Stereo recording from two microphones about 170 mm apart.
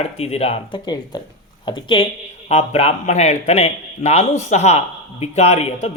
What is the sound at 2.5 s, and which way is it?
Speech, 40° left (ahead or behind).